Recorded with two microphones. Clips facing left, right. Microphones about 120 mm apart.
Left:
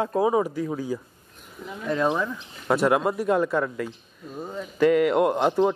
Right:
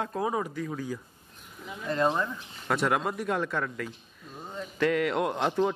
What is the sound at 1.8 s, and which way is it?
Speech, centre (ahead or behind).